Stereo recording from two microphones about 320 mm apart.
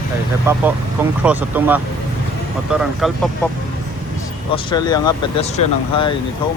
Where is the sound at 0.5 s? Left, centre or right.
Centre.